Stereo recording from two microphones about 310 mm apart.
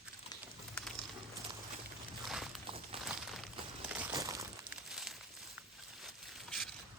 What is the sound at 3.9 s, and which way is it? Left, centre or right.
Crumpling, centre.